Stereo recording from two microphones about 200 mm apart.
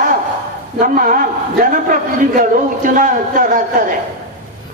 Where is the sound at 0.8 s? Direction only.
45° right (ahead or behind).